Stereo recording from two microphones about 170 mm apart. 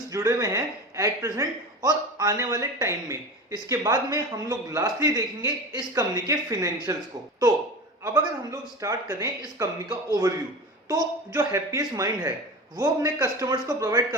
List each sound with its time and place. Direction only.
0.1 s a man's voice: 20° right (ahead or behind)